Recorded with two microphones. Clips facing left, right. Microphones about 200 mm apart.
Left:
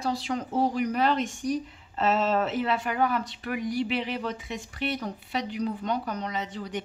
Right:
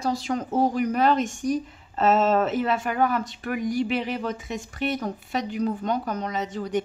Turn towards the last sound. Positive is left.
turn(degrees=-45)  # may be behind; listen again after turning